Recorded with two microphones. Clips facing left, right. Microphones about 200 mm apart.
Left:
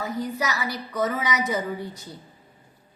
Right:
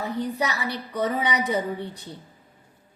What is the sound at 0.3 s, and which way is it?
Speech, 30° right (ahead or behind).